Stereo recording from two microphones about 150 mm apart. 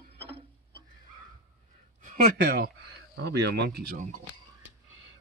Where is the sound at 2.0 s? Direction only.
90° right.